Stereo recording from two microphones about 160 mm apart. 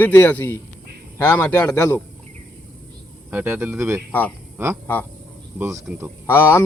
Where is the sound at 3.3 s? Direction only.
10° right (ahead or behind).